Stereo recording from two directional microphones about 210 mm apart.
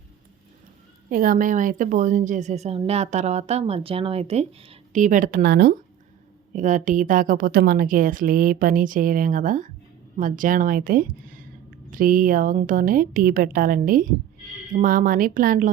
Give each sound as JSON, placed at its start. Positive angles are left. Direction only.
{"t": 1.1, "sound": "a woman's voice", "side_deg": -40}
{"t": 6.5, "sound": "a woman's voice", "side_deg": -35}